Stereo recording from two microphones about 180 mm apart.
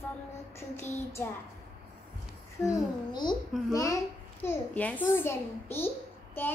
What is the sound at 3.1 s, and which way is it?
A child's voice, 25° left (ahead or behind).